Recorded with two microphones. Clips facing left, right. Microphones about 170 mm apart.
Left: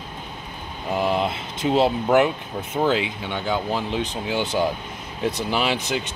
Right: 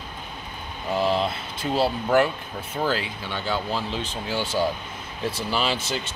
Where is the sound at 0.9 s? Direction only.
15° left (ahead or behind).